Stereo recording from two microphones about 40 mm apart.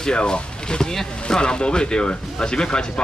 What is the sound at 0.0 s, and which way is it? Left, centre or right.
A man's voice, left.